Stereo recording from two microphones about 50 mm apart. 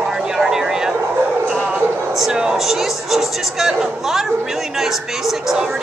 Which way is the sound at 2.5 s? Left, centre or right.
Centre.